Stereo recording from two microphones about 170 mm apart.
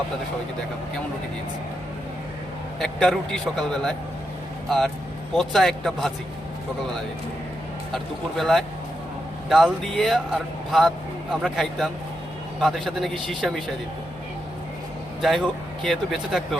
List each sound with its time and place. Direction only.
2.7 s speech: centre (ahead or behind)
5.4 s speech: centre (ahead or behind)
7.9 s speech: centre (ahead or behind)
15.2 s speech: centre (ahead or behind)